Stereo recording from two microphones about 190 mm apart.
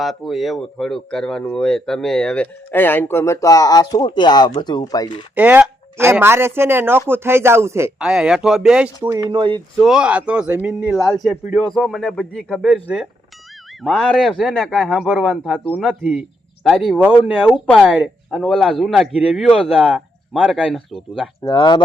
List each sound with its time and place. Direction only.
0.0 s speech: centre (ahead or behind); by 5.2 s 20° left (ahead or behind)
5.3 s a man's voice: 10° right (ahead or behind)
9.0 s speech: 20° right (ahead or behind)
9.7 s a man's voice: centre (ahead or behind)
21.4 s speech: 25° left (ahead or behind)